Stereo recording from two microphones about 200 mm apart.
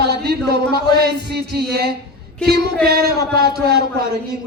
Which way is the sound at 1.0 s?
55° right (ahead or behind).